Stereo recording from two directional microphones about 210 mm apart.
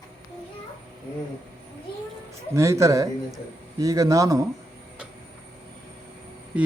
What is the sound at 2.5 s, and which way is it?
A man's voice, 15° right (ahead or behind).